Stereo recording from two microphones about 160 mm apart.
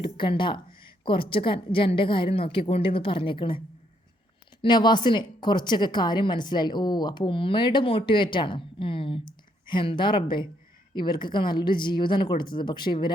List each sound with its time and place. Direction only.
0.0 s a woman's voice: 30° left (ahead or behind)
4.6 s a woman's voice: 30° left (ahead or behind)